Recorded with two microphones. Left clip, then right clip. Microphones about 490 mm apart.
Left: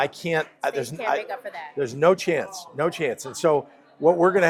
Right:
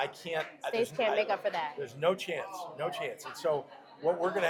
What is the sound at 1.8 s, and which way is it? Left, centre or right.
Speech, left.